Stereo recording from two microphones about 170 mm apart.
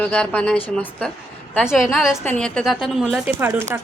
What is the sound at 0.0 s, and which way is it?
Speech, 5° left (ahead or behind).